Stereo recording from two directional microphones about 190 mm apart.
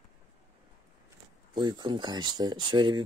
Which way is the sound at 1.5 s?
25° right (ahead or behind).